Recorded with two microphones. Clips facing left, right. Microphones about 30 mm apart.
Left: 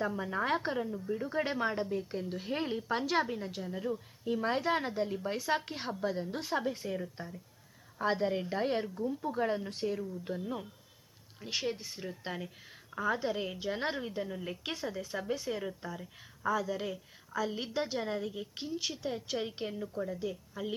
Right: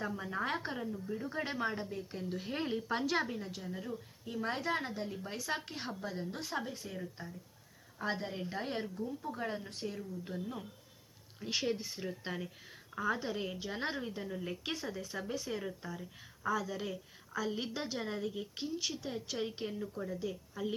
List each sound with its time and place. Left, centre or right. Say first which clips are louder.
0.0 s a woman's voice: left 4 dB; centre